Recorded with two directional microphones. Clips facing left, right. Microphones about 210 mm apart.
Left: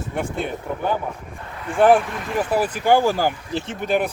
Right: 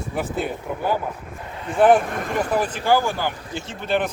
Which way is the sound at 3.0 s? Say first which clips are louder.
Left 5 dB; 40° left (ahead or behind).